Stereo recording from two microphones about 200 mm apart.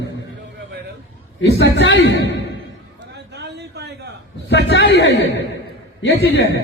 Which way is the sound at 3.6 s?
55° right (ahead or behind).